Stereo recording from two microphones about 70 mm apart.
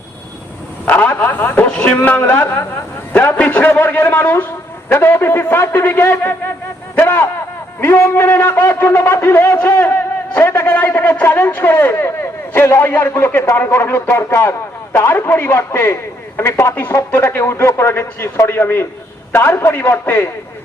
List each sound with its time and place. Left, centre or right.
0.9 s a man's voice: left
1.6 s speech: centre
2.0 s a man's voice: left
6.9 s a sound: left
7.8 s a man's voice: left